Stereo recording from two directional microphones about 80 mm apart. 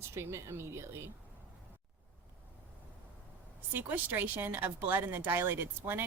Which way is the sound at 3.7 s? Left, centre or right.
Right.